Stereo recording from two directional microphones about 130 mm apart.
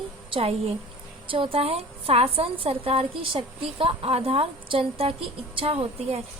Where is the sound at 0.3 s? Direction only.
50° right (ahead or behind).